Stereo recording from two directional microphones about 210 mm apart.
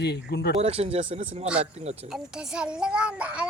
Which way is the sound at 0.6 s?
30° right (ahead or behind).